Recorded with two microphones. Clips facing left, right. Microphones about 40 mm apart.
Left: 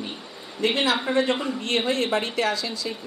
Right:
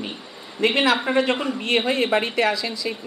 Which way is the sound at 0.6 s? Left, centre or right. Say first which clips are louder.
Right 4 dB; centre.